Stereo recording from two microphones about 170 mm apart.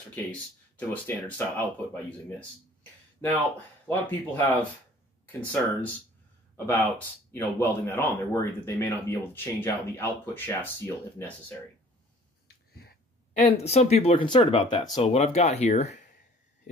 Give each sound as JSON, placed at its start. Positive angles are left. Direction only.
{"t": 0.1, "sound": "speech", "side_deg": 10}
{"t": 3.2, "sound": "speech", "side_deg": 10}
{"t": 13.3, "sound": "speech", "side_deg": 40}